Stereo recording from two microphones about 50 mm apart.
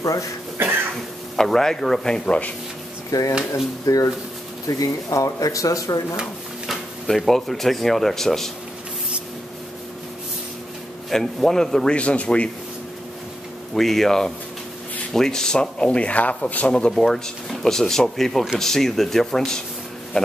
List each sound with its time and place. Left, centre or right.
0.6 s cough: right
1.3 s speech: centre
3.1 s speech: left
6.7 s speech: centre
11.1 s speech: centre; by 12.4 s left
13.7 s speech: centre; by 16.7 s left
16.9 s speech: centre